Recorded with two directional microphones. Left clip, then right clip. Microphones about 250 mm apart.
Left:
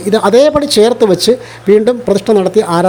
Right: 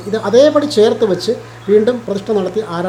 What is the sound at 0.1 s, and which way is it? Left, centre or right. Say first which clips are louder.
Speech: left 2 dB; left.